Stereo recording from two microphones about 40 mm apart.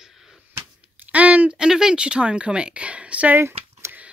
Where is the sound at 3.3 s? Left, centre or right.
Right.